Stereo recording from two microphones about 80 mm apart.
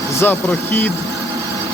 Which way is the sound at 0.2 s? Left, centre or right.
Left.